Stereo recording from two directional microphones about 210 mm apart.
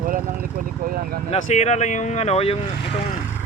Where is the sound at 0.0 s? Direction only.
40° right (ahead or behind).